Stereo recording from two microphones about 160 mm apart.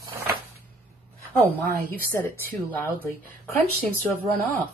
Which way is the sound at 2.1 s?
15° left (ahead or behind).